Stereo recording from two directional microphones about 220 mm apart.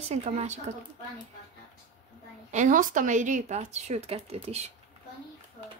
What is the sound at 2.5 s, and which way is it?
Speech, 35° right (ahead or behind).